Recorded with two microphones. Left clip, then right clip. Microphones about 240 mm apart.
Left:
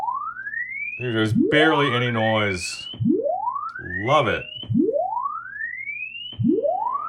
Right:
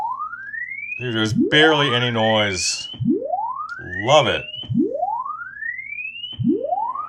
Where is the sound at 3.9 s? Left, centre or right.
Centre.